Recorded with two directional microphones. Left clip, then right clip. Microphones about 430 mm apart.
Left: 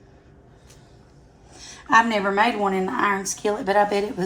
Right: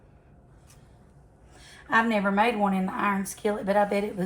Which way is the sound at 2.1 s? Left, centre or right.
Left.